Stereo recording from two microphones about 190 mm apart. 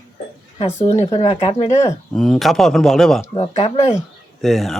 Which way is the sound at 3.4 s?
30° left (ahead or behind).